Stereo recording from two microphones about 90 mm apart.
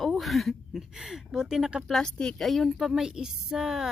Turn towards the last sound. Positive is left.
turn(degrees=-5)  # may be behind; listen again after turning